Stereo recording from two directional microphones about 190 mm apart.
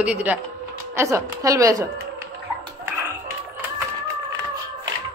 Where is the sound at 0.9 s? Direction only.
15° right (ahead or behind).